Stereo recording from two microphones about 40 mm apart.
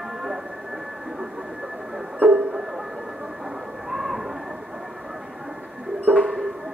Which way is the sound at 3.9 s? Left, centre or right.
Centre.